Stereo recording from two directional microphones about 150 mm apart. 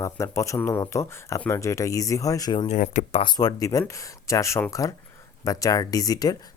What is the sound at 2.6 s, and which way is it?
Speech, 60° left (ahead or behind).